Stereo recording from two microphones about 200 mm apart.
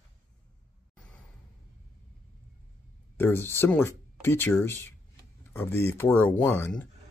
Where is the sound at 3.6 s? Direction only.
10° left (ahead or behind).